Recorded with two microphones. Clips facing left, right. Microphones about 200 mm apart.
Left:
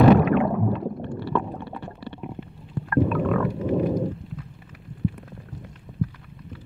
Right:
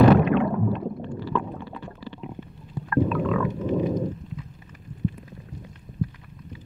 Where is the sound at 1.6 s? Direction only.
65° left (ahead or behind).